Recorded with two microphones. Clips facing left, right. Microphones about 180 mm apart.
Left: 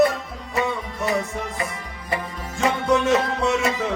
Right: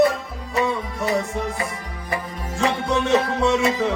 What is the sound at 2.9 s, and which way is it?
Music, 30° right (ahead or behind).